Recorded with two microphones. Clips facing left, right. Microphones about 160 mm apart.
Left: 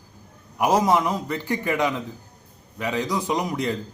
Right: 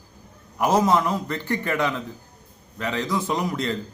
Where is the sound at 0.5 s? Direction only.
15° left (ahead or behind).